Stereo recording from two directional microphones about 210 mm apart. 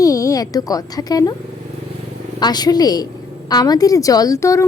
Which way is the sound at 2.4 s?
20° left (ahead or behind).